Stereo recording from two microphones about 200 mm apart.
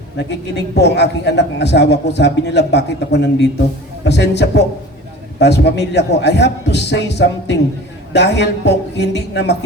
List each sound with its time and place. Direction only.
0.2 s a man's voice: 60° left (ahead or behind)